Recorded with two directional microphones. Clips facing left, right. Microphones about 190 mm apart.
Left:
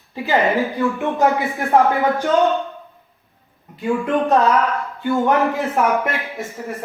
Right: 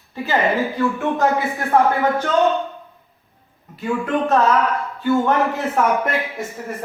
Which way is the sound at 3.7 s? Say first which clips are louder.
Left 2 dB; 15° left (ahead or behind).